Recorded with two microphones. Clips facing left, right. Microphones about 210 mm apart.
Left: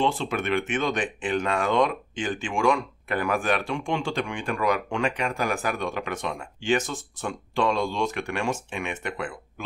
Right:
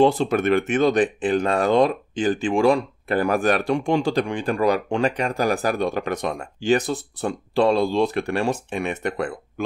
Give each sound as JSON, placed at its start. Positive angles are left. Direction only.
{"t": 0.0, "sound": "speech", "side_deg": -40}